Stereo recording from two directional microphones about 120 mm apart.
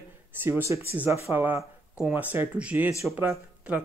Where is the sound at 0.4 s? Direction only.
20° right (ahead or behind).